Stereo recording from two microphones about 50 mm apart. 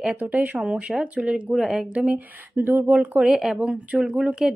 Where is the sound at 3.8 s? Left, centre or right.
Right.